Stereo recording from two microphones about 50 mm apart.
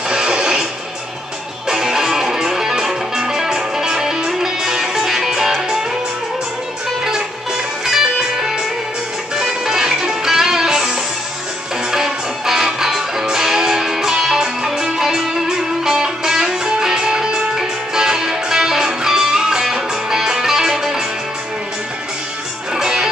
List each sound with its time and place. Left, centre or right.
0.1 s music: centre
1.7 s music: centre
7.8 s music: centre
22.8 s music: centre